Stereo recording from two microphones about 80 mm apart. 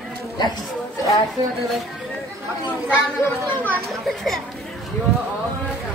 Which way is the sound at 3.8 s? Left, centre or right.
Centre.